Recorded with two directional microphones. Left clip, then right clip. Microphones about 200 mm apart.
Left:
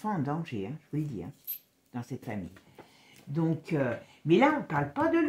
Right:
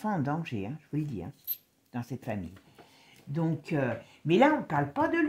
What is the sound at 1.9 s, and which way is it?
Speech, 45° right (ahead or behind).